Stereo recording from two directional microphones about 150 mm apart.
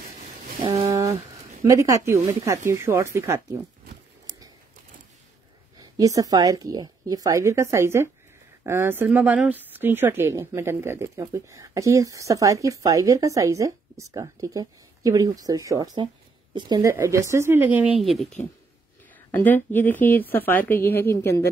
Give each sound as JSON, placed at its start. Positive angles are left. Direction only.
{"t": 0.6, "sound": "a sound", "side_deg": -35}
{"t": 1.6, "sound": "speech", "side_deg": -20}
{"t": 5.8, "sound": "speech", "side_deg": -25}
{"t": 18.0, "sound": "speech", "side_deg": 0}
{"t": 19.3, "sound": "a woman's voice", "side_deg": 10}